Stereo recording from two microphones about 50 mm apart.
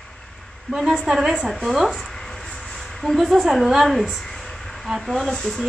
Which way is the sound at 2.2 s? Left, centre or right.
Centre.